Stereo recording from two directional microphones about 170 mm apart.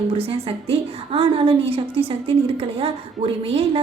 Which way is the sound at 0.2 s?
35° right (ahead or behind).